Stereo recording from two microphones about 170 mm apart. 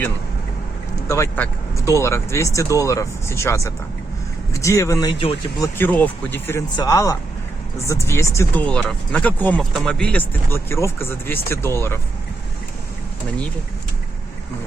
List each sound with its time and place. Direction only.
1.0 s speech: 15° left (ahead or behind)